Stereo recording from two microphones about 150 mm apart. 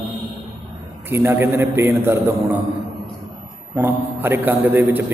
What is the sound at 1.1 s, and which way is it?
A man's voice, 15° right (ahead or behind).